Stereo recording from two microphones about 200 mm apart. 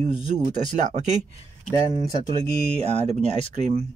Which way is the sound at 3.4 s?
35° right (ahead or behind).